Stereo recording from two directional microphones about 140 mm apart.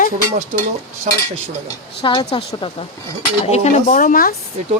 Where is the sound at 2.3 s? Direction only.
40° left (ahead or behind); by 4.3 s 80° left.